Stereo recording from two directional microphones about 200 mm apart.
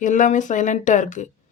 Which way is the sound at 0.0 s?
40° left (ahead or behind).